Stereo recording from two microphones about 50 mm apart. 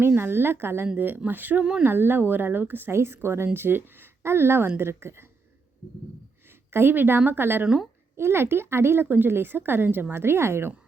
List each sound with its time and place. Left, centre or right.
0.2 s a woman's voice: right
6.7 s a woman's voice: right
8.1 s a woman's voice: right